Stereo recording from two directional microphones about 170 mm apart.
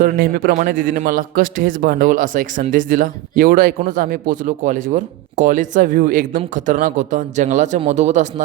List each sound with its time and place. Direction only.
0.0 s a man's voice: 60° right (ahead or behind)